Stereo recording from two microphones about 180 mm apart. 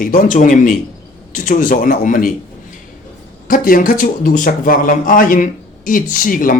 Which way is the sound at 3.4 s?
50° left (ahead or behind).